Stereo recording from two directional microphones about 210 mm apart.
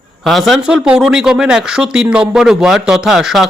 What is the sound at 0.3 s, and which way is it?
Speech, centre (ahead or behind).